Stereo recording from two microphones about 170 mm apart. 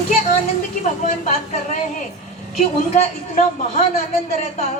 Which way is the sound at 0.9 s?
45° left (ahead or behind).